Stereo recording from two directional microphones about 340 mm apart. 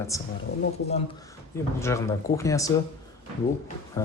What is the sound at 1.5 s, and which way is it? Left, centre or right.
Speech, centre.